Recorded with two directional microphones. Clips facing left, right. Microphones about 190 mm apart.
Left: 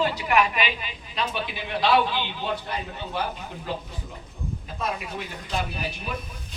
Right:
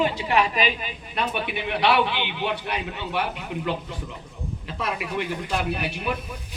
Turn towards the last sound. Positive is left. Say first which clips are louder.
# right 6 dB
turn(degrees=-75)  # may be behind; listen again after turning